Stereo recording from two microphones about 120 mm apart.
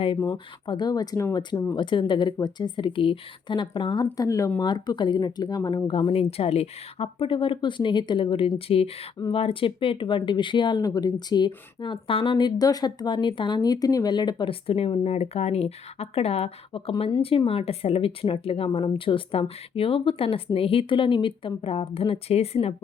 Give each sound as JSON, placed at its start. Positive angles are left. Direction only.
{"t": 0.6, "sound": "speech", "side_deg": 40}
{"t": 4.6, "sound": "speech", "side_deg": 40}
{"t": 5.9, "sound": "speech", "side_deg": 50}
{"t": 14.7, "sound": "speech", "side_deg": 50}